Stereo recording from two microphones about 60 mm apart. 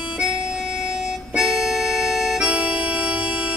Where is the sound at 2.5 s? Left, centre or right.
Right.